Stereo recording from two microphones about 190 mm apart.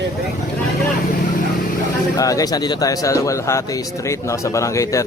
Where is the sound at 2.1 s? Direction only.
20° left (ahead or behind).